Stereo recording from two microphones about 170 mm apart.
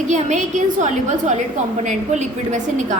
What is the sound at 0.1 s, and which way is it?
A woman's voice, 45° right (ahead or behind).